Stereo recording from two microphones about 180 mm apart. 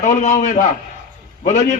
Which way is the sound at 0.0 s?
45° left (ahead or behind).